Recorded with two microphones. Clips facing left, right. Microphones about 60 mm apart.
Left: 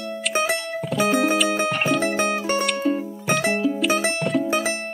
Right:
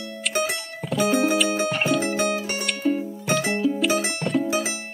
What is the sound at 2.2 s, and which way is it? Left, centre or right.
Music, left.